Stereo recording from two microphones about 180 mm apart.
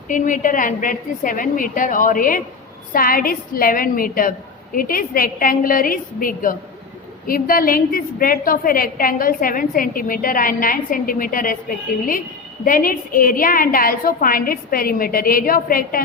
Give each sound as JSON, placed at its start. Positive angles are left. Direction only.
{"t": 0.1, "sound": "a woman's voice", "side_deg": 45}
{"t": 12.6, "sound": "a woman's voice", "side_deg": 50}